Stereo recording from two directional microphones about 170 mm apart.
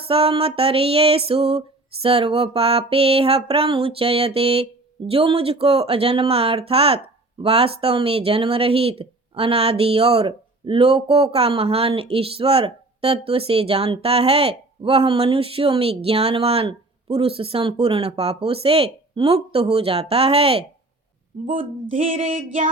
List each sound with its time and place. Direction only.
0.1 s speech: 35° right (ahead or behind)
21.8 s female singing: 50° right (ahead or behind)